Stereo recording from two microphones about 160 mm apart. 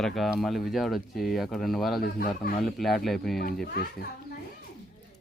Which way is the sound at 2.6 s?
Centre (ahead or behind).